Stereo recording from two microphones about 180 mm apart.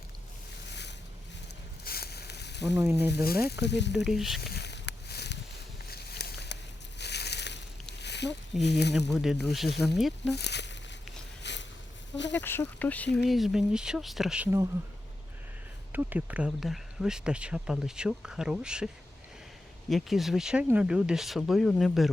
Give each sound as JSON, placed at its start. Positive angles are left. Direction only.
{"t": 0.7, "sound": "boat", "side_deg": 70}
{"t": 1.8, "sound": "a sound", "side_deg": 60}
{"t": 2.7, "sound": "speech", "side_deg": -15}
{"t": 3.2, "sound": "speech", "side_deg": 60}
{"t": 4.0, "sound": "speech", "side_deg": 0}
{"t": 4.4, "sound": "a sound", "side_deg": 65}
{"t": 8.6, "sound": "speech", "side_deg": 70}
{"t": 9.0, "sound": "speech", "side_deg": 0}
{"t": 10.3, "sound": "a sound", "side_deg": 70}
{"t": 12.3, "sound": "speech", "side_deg": 10}
{"t": 15.9, "sound": "speech", "side_deg": -10}
{"t": 19.9, "sound": "speech", "side_deg": 0}